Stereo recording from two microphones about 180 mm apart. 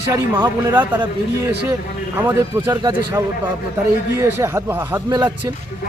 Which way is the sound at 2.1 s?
15° right (ahead or behind).